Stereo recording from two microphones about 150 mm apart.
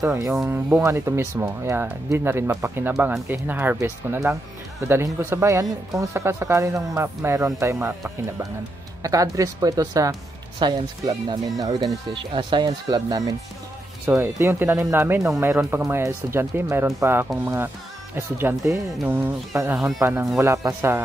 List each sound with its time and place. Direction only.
0.0 s speech: 15° right (ahead or behind)
9.0 s speech: 20° right (ahead or behind)
12.1 s speech: 35° right (ahead or behind); by 21.0 s 20° right (ahead or behind)